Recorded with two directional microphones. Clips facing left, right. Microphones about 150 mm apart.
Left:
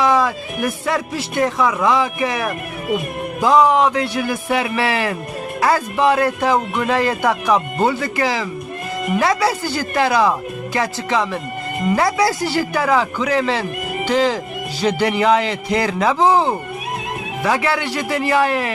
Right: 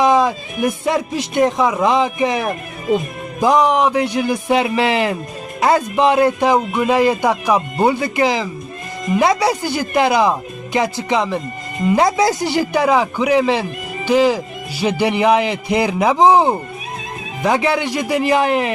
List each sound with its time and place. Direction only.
0.0 s speech: 20° right (ahead or behind)